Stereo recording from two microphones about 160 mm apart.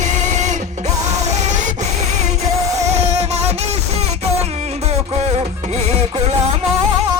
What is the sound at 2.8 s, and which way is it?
Music, 45° right (ahead or behind).